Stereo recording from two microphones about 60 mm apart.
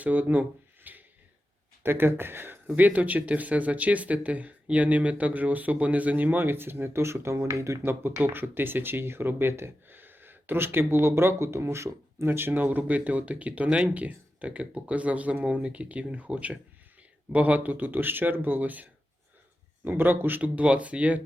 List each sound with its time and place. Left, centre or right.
0.0 s speech: right
0.9 s a sound: right
1.8 s speech: right
2.7 s speech: right
7.8 s speech: right